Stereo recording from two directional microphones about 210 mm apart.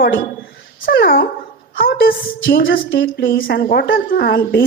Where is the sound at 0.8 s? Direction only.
45° left (ahead or behind).